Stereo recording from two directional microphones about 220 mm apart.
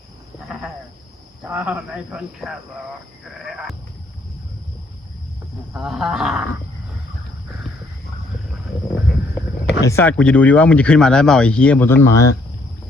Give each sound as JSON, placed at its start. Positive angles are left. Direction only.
{"t": 1.5, "sound": "speech", "side_deg": -5}
{"t": 3.2, "sound": "sheep", "side_deg": 0}
{"t": 5.7, "sound": "speech", "side_deg": 0}
{"t": 9.8, "sound": "speech", "side_deg": 10}